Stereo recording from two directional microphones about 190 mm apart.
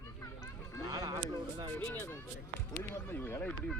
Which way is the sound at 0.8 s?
20° right (ahead or behind).